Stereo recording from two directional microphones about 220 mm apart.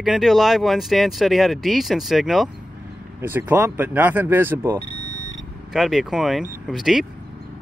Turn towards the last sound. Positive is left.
turn(degrees=0)  # may be behind; listen again after turning